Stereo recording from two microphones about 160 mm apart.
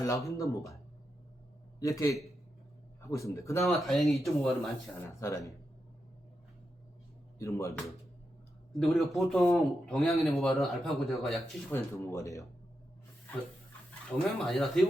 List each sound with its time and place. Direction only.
0.0 s speech: 20° left (ahead or behind)
1.8 s speech: 20° left (ahead or behind)
3.6 s speech: centre (ahead or behind)
4.9 s speech: 20° left (ahead or behind)
7.3 s speech: 20° left (ahead or behind)
8.7 s speech: centre (ahead or behind)
11.7 s speech: 15° left (ahead or behind)
14.1 s speech: centre (ahead or behind)